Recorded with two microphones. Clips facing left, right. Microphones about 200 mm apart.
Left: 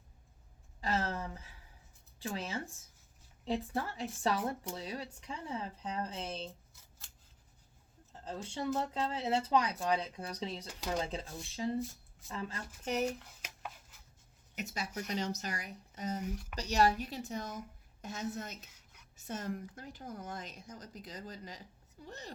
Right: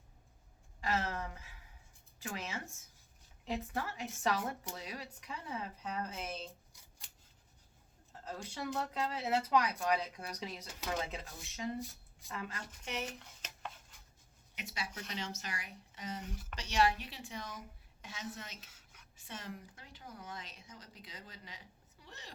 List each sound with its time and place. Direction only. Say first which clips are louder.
0.8 s speech: left 1 dB; 35° left (ahead or behind)
8.2 s speech: left 4 dB; 30° left (ahead or behind)
13.1 s a sound: left 1 dB; 5° left (ahead or behind)
14.5 s speech: left 5 dB; 40° left (ahead or behind)
16.2 s speech: left 6 dB; 5° left (ahead or behind)
16.6 s speech: left 3 dB; 40° left (ahead or behind)